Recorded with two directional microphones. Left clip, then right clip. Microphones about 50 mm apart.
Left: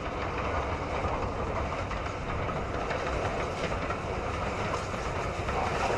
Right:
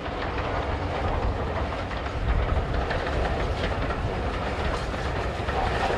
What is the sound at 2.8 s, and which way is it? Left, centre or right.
Train, left.